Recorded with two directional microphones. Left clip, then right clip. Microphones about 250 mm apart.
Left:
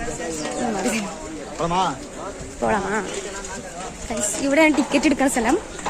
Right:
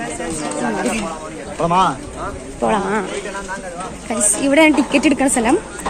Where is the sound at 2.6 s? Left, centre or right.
Centre.